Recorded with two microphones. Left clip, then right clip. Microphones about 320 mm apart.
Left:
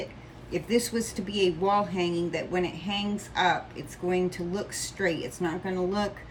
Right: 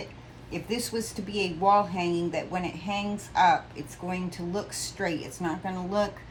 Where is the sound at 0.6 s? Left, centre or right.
Centre.